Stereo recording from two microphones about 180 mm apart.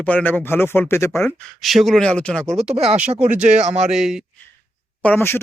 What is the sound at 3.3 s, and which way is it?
Speech, 5° right (ahead or behind).